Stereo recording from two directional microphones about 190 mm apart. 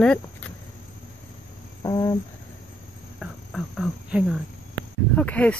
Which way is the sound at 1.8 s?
20° left (ahead or behind).